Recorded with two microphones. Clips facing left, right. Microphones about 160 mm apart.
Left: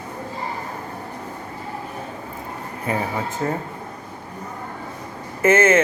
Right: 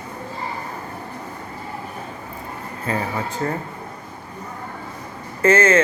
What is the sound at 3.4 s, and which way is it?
Speech, 10° left (ahead or behind).